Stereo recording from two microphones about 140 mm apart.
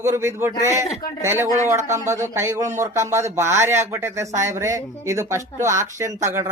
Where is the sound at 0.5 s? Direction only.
25° left (ahead or behind).